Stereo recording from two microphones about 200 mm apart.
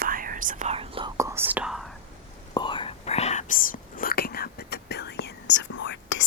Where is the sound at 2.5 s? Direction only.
25° left (ahead or behind); by 6.3 s 65° left (ahead or behind).